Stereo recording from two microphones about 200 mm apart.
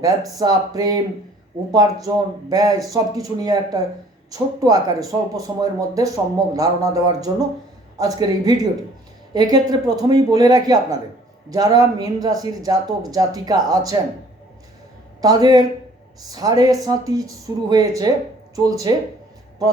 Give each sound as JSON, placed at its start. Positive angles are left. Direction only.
{"t": 0.0, "sound": "speech", "side_deg": -20}
{"t": 15.2, "sound": "speech", "side_deg": -20}